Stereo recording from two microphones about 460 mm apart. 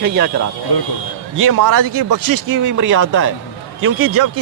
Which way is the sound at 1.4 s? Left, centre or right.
Right.